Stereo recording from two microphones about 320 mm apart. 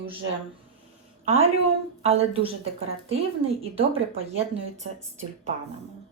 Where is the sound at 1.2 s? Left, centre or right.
Centre.